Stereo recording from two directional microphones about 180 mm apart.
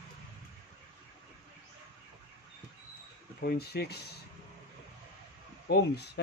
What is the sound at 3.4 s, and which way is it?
Speech, 60° left (ahead or behind).